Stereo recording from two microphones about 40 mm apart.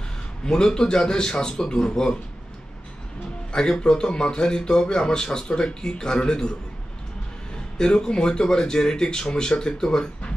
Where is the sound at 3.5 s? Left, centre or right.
Centre.